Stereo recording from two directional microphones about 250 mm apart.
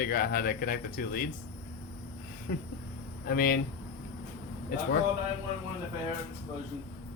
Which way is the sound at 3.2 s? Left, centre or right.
Left.